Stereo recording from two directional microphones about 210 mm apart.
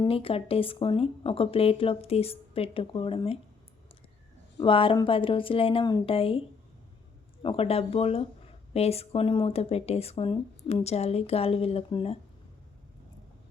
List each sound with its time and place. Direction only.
0.0 s speech: 25° left (ahead or behind)
4.5 s speech: 25° left (ahead or behind)
7.4 s speech: 25° left (ahead or behind)